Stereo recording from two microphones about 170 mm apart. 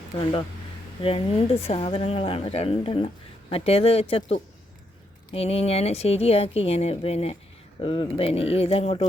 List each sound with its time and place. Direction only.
0.2 s a woman's voice: 30° left (ahead or behind)